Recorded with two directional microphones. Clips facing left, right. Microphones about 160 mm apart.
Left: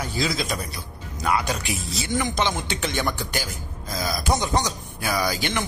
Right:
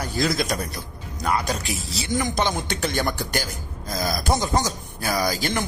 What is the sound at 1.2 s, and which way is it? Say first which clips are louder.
Speech: even; 40° right (ahead or behind).